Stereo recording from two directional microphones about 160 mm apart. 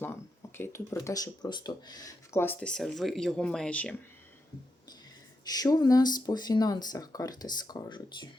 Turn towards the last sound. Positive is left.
turn(degrees=25)  # may be behind; listen again after turning